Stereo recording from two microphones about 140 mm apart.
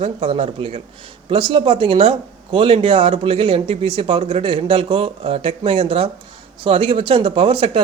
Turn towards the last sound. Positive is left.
turn(degrees=-40)  # may be behind; listen again after turning